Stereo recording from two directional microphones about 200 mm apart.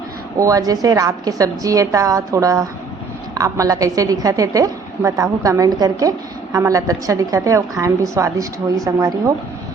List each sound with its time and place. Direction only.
0.3 s a woman's voice: 15° right (ahead or behind)